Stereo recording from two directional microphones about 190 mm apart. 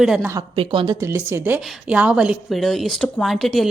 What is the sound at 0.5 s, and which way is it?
Speech, 25° right (ahead or behind).